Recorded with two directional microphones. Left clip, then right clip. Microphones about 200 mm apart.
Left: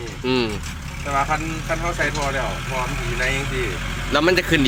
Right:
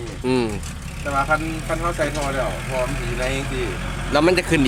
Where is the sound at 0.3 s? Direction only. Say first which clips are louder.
Even; 15° right (ahead or behind).